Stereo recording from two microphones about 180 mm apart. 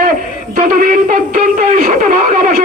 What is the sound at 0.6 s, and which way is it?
Speech, 55° right (ahead or behind).